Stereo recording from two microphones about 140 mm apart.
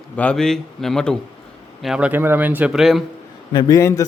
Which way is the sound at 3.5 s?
25° left (ahead or behind).